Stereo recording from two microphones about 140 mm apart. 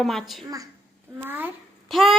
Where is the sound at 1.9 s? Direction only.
Centre (ahead or behind).